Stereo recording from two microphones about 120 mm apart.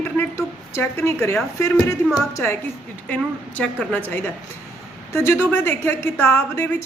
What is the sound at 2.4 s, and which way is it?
A woman's voice, 15° left (ahead or behind).